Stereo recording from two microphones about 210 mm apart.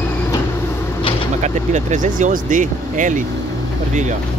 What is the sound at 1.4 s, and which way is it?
Speech, 35° right (ahead or behind).